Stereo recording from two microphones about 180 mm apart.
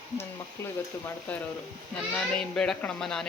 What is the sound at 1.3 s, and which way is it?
Speech, 5° left (ahead or behind).